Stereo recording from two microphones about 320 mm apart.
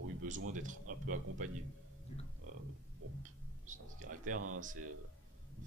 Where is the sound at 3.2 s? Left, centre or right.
Right.